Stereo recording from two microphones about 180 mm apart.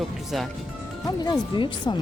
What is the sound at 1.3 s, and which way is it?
Speech, 25° left (ahead or behind).